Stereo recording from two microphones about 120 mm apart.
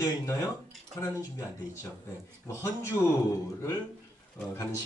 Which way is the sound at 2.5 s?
20° left (ahead or behind).